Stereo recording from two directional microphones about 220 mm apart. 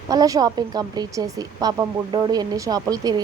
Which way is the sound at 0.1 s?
15° right (ahead or behind).